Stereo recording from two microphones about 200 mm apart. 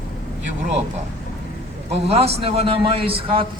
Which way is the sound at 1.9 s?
30° right (ahead or behind).